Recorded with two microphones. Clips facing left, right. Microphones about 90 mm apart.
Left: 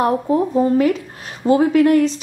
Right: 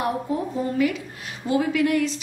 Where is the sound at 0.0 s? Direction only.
40° left (ahead or behind).